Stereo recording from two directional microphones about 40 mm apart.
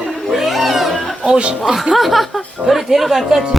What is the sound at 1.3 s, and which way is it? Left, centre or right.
Music, right.